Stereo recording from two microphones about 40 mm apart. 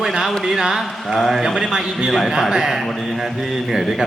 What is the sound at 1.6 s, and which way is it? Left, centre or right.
A man's voice, centre.